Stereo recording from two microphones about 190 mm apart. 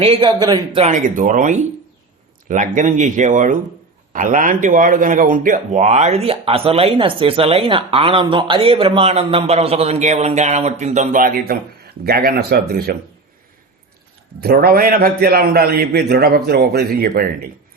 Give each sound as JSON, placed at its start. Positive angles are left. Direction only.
{"t": 0.0, "sound": "speech", "side_deg": -30}
{"t": 0.9, "sound": "a man's voice", "side_deg": -45}
{"t": 14.4, "sound": "a man's voice", "side_deg": -55}